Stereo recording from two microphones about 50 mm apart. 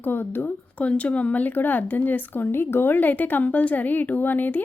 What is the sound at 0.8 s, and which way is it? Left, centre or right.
Speech, left.